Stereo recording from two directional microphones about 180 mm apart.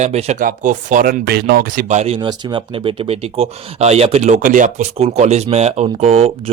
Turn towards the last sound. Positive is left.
turn(degrees=-35)  # may be behind; listen again after turning